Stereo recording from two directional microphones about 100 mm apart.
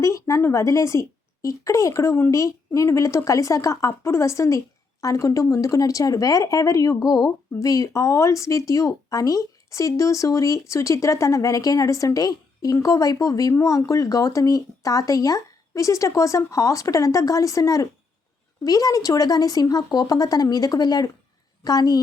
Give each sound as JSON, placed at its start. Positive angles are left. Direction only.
{"t": 0.0, "sound": "a woman's voice", "side_deg": 30}